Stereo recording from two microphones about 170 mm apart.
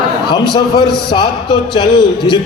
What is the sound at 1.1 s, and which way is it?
A man's voice, 30° left (ahead or behind).